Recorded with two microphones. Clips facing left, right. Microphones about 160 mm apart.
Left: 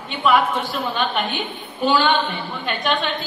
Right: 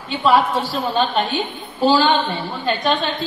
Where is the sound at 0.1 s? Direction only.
35° right (ahead or behind).